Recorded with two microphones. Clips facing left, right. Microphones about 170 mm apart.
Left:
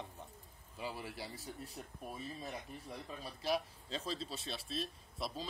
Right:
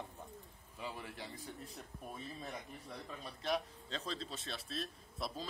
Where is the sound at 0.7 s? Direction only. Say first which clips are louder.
Left 2 dB; 10° left (ahead or behind).